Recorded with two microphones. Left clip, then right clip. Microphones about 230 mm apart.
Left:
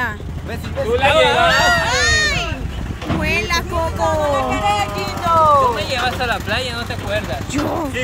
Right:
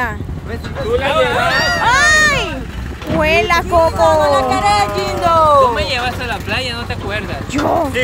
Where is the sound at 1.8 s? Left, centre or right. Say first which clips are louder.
Right 5 dB; centre.